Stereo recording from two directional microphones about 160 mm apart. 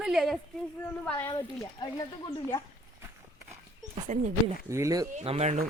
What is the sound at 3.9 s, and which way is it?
Speech, 50° right (ahead or behind).